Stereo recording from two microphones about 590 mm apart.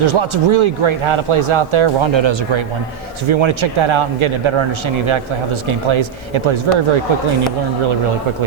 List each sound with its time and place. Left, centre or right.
0.0 s speech: right
5.9 s speech: right